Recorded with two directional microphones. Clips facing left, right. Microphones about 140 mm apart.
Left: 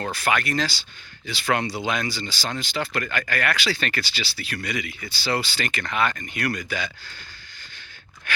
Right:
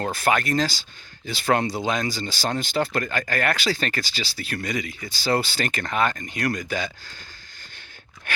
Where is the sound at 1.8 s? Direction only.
40° right (ahead or behind).